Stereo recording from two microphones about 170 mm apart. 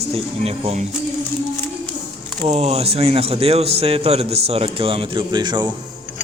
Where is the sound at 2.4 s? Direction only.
35° right (ahead or behind).